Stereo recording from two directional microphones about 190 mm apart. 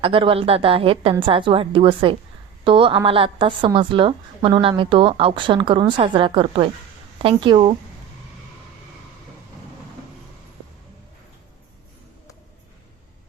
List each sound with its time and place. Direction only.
0.0 s a woman's voice: 30° right (ahead or behind)